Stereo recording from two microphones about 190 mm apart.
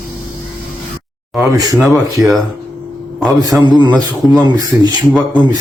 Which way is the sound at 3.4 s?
20° right (ahead or behind).